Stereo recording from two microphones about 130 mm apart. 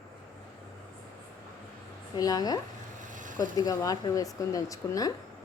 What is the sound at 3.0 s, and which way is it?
Vehicle, 80° right.